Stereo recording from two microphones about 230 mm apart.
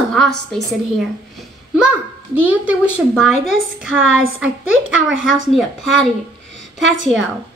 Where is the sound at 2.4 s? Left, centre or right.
Centre.